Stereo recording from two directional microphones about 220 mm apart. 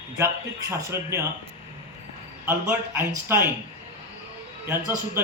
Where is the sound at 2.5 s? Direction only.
10° right (ahead or behind).